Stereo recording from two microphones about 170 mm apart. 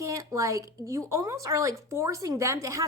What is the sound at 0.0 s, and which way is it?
Speech, 20° right (ahead or behind).